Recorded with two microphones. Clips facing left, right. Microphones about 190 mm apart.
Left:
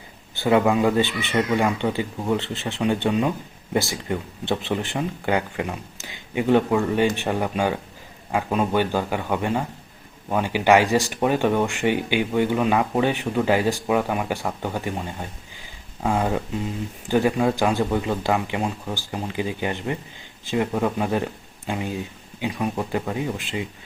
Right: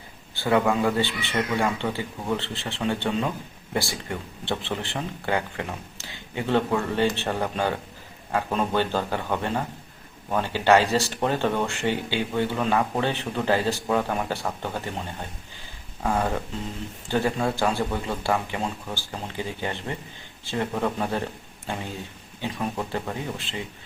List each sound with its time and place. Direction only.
0.3 s speech: 20° left (ahead or behind)
16.0 s speech: 15° left (ahead or behind)